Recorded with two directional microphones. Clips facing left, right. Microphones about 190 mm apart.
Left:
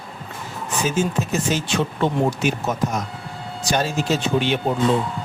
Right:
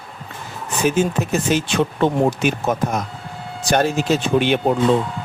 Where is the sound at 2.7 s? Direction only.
55° right (ahead or behind).